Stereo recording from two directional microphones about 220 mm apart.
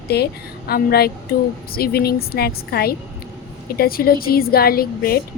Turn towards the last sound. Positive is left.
turn(degrees=45)  # may be behind; listen again after turning